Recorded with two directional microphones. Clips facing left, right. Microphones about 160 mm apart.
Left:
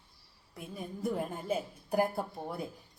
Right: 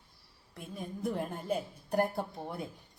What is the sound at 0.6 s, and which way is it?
A woman's voice, centre (ahead or behind).